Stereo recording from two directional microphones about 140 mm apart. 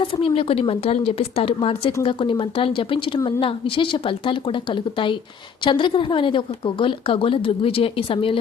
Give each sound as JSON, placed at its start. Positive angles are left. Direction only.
{"t": 0.2, "sound": "a woman's voice", "side_deg": 40}